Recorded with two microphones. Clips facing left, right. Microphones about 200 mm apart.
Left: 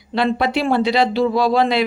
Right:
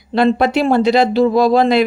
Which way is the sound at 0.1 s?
45° right (ahead or behind).